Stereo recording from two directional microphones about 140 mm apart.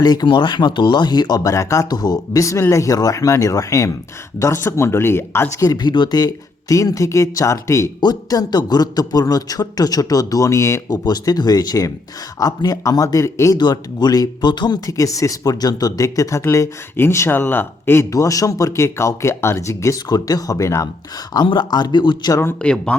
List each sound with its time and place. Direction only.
0.0 s speech: 30° left (ahead or behind)
21.3 s speech: 35° left (ahead or behind)
22.3 s speech: 15° left (ahead or behind)